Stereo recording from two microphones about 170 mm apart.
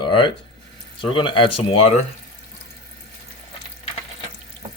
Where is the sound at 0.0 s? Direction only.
30° left (ahead or behind).